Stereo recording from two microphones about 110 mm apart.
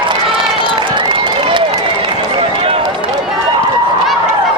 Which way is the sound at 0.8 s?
50° right (ahead or behind).